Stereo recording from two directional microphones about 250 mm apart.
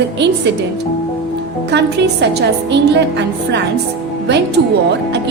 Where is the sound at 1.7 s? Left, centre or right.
Right.